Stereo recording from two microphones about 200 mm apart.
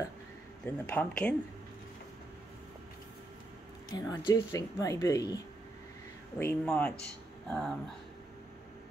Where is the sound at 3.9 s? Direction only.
20° left (ahead or behind).